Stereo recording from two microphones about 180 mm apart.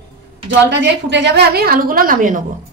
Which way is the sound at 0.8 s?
70° right (ahead or behind).